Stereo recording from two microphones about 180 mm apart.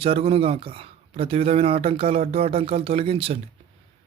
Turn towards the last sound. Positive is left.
turn(degrees=-30)  # may be behind; listen again after turning